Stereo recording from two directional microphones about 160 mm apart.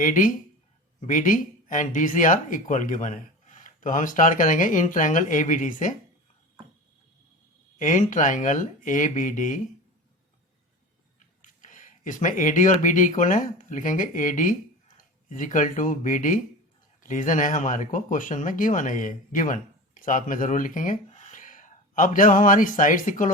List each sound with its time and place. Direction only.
0.0 s speech: 55° left (ahead or behind)
7.8 s speech: 50° left (ahead or behind)
11.4 s speech: 55° left (ahead or behind)